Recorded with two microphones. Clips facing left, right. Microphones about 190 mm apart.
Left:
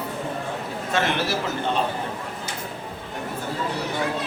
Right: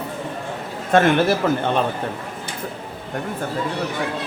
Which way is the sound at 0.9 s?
50° right (ahead or behind).